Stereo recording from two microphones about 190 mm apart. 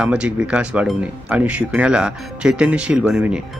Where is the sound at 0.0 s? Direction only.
5° right (ahead or behind).